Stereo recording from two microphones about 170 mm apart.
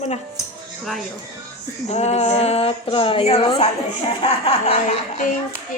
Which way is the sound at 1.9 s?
40° left (ahead or behind).